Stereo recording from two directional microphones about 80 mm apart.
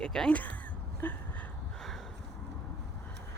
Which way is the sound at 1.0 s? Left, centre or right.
Left.